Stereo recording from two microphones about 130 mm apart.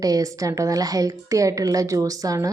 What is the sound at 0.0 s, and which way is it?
Speech, 25° right (ahead or behind).